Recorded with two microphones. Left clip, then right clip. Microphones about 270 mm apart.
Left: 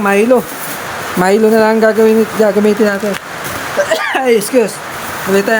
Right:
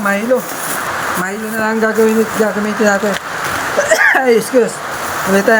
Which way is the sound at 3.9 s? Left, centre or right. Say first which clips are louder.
Right 3 dB; centre.